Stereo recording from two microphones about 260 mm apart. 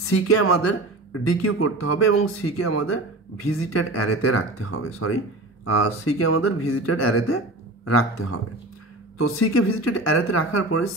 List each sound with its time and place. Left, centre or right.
0.0 s a man's voice: left